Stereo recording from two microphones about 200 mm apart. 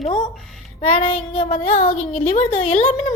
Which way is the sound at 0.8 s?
30° left (ahead or behind).